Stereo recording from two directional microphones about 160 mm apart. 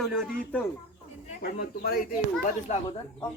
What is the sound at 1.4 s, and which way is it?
Speech, 75° left (ahead or behind).